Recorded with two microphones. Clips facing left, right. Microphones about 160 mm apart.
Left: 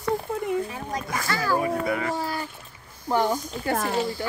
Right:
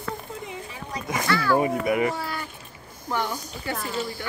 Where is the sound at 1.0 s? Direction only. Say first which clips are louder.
Right 2 dB; 20° right (ahead or behind).